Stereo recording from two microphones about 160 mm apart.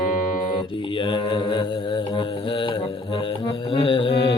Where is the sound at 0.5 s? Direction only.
30° left (ahead or behind).